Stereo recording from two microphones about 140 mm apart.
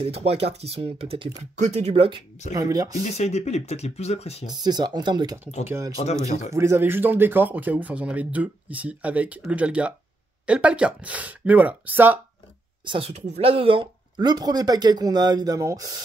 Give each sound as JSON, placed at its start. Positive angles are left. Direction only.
{"t": 0.0, "sound": "speech", "side_deg": -45}
{"t": 2.5, "sound": "speech", "side_deg": -25}
{"t": 3.0, "sound": "speech", "side_deg": 50}
{"t": 4.5, "sound": "speech", "side_deg": -30}
{"t": 12.8, "sound": "speech", "side_deg": -35}
{"t": 13.1, "sound": "speech", "side_deg": -50}